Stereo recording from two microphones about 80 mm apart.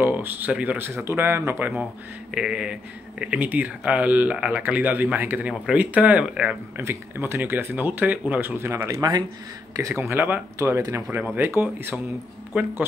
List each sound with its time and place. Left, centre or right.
0.0 s speech: right
2.3 s speech: centre
6.8 s speech: right
10.1 s speech: right